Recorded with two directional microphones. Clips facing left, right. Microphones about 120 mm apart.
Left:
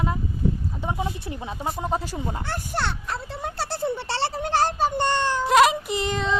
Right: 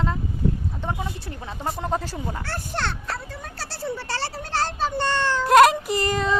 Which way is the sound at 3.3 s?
25° left (ahead or behind).